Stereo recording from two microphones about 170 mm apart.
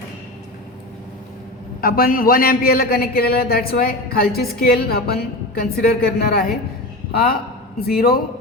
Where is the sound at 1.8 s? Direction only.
60° left (ahead or behind).